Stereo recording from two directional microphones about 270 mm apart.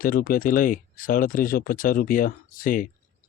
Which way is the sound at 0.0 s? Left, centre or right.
Left.